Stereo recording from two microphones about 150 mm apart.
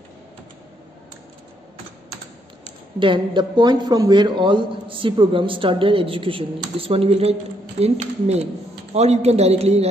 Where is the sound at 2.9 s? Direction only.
35° right (ahead or behind).